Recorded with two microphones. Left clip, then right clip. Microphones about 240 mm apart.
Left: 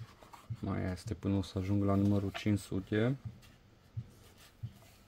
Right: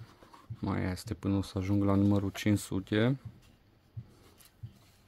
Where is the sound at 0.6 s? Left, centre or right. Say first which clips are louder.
Right 4 dB; right.